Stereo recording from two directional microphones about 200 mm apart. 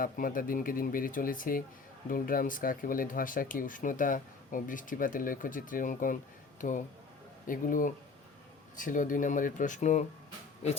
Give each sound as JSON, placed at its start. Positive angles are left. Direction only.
{"t": 0.0, "sound": "speech", "side_deg": 45}